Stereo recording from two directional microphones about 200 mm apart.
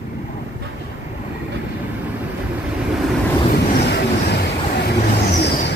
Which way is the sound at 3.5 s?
55° left (ahead or behind).